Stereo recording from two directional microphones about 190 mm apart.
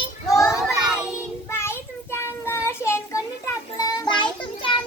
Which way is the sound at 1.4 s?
15° left (ahead or behind).